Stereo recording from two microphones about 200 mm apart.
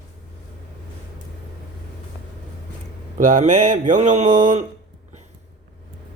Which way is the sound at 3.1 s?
35° right (ahead or behind).